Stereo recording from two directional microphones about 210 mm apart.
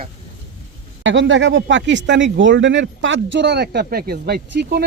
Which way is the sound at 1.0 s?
65° right (ahead or behind).